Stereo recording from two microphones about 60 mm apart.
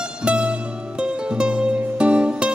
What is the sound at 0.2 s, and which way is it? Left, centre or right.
Music, centre.